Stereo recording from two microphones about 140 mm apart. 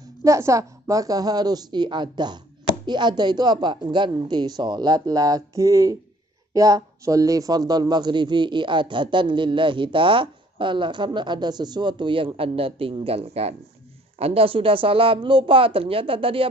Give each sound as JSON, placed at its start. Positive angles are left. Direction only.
{"t": 0.2, "sound": "a woman's voice", "side_deg": -20}